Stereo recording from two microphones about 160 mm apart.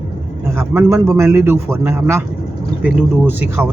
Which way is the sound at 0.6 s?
15° right (ahead or behind).